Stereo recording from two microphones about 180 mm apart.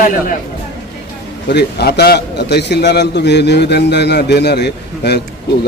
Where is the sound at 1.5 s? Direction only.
65° left (ahead or behind).